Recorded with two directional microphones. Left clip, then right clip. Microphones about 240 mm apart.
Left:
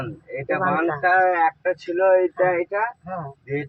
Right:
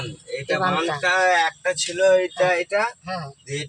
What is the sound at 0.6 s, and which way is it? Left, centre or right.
Speech, right.